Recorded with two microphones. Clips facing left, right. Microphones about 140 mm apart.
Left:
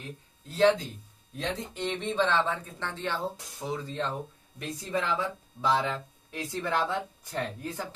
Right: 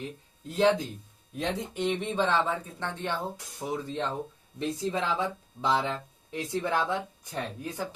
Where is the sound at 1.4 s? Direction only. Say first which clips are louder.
Right 3 dB; 10° right (ahead or behind).